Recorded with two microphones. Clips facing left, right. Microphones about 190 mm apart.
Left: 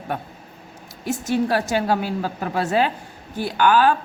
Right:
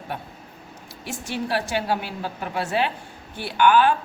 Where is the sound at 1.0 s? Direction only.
40° left (ahead or behind).